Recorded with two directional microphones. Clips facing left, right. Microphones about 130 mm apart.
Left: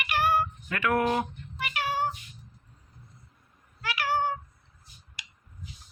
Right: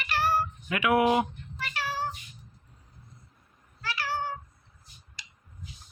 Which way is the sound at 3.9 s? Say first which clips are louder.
Left 5 dB; 55° left (ahead or behind).